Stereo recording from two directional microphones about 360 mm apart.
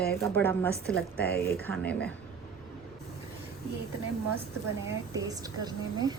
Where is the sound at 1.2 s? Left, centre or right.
Left.